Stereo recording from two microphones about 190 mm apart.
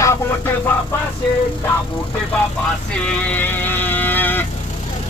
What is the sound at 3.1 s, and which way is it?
Vehicle, 5° left (ahead or behind).